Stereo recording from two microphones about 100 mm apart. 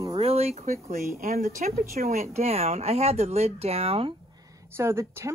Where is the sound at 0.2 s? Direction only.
85° right.